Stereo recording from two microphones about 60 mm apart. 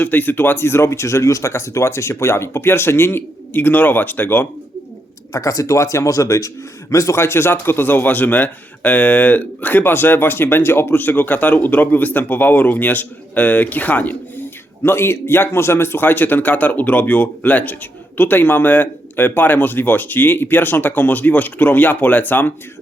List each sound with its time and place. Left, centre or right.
0.0 s speech: left
5.3 s a man's voice: left
14.8 s a man's voice: left